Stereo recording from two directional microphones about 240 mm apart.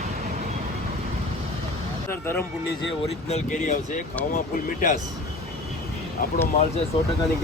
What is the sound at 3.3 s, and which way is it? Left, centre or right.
Speech, left.